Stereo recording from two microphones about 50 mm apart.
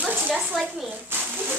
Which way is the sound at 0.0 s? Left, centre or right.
Right.